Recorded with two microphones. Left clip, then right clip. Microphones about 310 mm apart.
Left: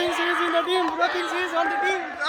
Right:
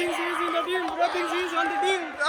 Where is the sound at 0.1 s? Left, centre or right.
Left.